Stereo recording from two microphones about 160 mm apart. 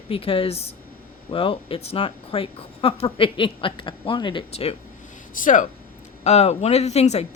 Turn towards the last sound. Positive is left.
turn(degrees=45)  # may be behind; listen again after turning